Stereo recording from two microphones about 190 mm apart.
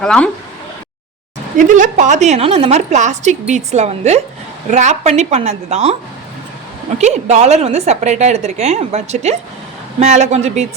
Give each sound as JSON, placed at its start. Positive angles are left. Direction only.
{"t": 0.0, "sound": "speech", "side_deg": 5}
{"t": 1.5, "sound": "a woman's voice", "side_deg": -40}
{"t": 7.0, "sound": "a woman's voice", "side_deg": -35}